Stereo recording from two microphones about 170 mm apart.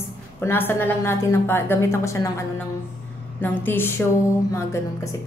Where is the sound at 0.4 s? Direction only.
10° left (ahead or behind).